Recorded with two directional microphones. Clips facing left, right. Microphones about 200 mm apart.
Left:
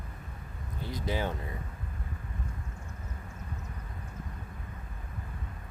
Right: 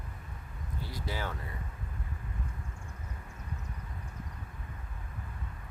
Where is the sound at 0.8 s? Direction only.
20° left (ahead or behind).